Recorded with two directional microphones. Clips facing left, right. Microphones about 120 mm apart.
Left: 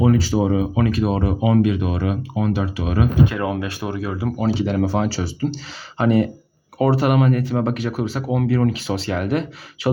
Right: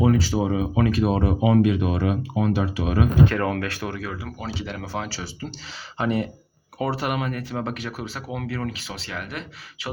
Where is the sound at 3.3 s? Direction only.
10° left (ahead or behind); by 5.2 s 40° left (ahead or behind).